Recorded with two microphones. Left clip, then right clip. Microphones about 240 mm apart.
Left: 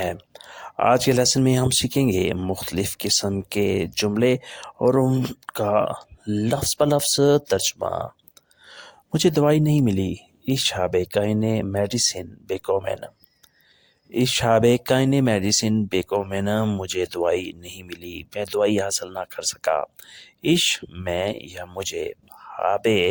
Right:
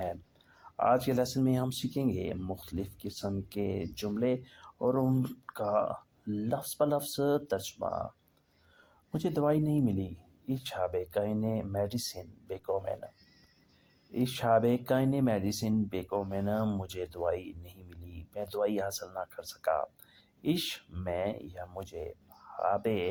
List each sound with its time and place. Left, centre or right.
0.0 s speech: left
14.1 s speech: left